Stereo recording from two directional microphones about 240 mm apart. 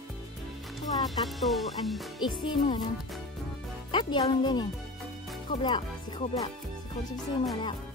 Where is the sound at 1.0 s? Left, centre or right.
Centre.